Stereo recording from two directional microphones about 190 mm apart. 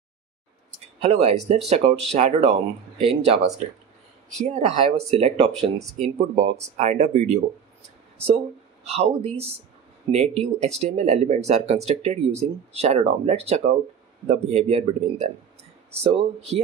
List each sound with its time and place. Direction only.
1.0 s speech: 30° right (ahead or behind)
8.8 s speech: 35° right (ahead or behind)